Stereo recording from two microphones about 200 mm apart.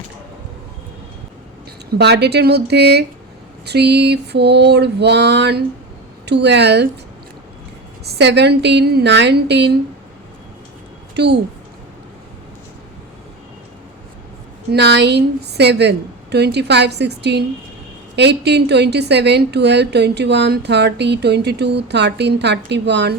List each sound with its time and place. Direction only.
2.0 s a woman's voice: 55° right (ahead or behind)
8.2 s a woman's voice: 55° right (ahead or behind)
11.1 s a woman's voice: 55° right (ahead or behind)
14.7 s a woman's voice: 60° right (ahead or behind)